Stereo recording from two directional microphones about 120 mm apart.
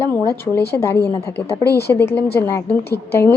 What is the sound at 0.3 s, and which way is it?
A woman's voice, 20° left (ahead or behind).